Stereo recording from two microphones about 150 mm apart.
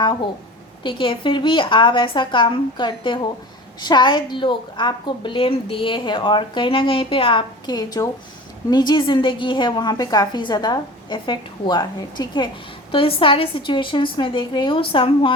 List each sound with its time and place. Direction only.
0.0 s a woman's voice: 30° left (ahead or behind)